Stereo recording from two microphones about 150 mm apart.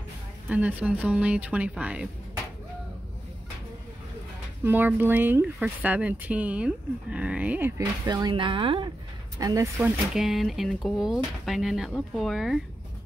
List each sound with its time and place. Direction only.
0.5 s speech: 10° right (ahead or behind)
4.6 s speech: 15° right (ahead or behind)
8.1 s speech: 30° right (ahead or behind)
9.8 s speech: centre (ahead or behind)